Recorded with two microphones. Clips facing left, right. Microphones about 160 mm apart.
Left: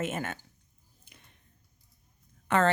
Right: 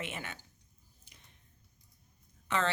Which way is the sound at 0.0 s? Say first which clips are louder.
Left 9 dB; 45° left (ahead or behind).